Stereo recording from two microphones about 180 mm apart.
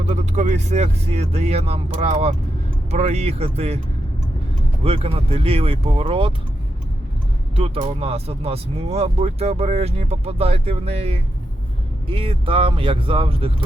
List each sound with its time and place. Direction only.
0.0 s speech: 40° right (ahead or behind)
4.8 s speech: 35° right (ahead or behind)
7.6 s speech: 35° right (ahead or behind)